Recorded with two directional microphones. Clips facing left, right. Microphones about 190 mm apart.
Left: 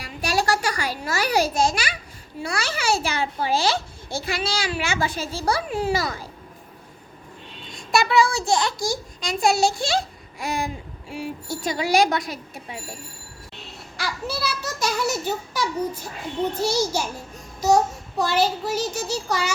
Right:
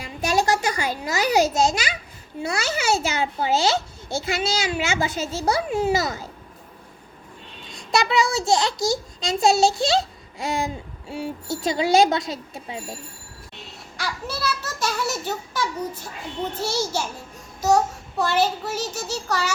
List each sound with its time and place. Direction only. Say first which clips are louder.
0.0 s a sound: right 2 dB; 20° right (ahead or behind)
2.4 s a child's voice: right 2 dB; 20° right (ahead or behind)
7.9 s a child's voice: left 1 dB; 20° right (ahead or behind)
13.9 s a child's voice: left 1 dB; 10° left (ahead or behind)
18.2 s a child's voice: even; 10° left (ahead or behind)